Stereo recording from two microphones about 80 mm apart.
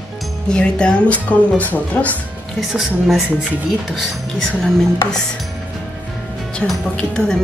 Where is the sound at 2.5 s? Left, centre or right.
Centre.